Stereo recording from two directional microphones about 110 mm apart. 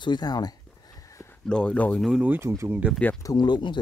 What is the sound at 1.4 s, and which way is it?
Speech, 10° left (ahead or behind).